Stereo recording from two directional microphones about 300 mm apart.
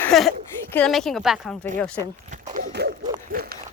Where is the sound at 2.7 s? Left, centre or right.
Right.